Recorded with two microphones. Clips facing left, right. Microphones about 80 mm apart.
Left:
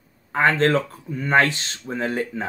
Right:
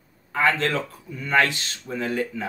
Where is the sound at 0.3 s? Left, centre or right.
Left.